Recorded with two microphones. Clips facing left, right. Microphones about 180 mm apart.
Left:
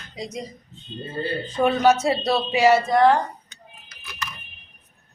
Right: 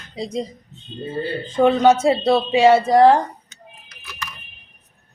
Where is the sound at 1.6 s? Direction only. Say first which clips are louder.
Right 4 dB; 25° right (ahead or behind).